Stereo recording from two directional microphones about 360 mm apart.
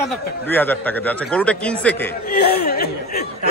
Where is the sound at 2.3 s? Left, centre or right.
Left.